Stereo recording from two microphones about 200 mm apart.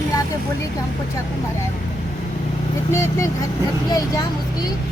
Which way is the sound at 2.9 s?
15° left (ahead or behind).